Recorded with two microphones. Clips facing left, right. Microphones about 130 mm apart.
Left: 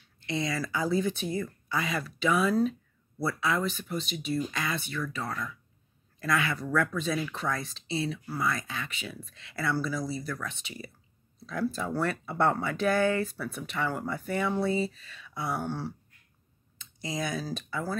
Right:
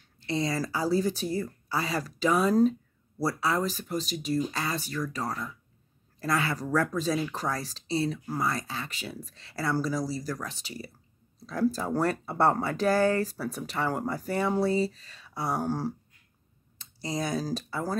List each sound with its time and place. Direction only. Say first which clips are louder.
0.0 s speech: right 2 dB; 35° right (ahead or behind)
11.3 s a sound: right 1 dB; 35° right (ahead or behind)
11.7 s speech: right 3 dB; 35° right (ahead or behind)